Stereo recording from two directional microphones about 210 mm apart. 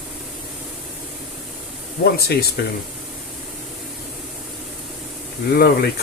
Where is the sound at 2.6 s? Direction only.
50° left (ahead or behind).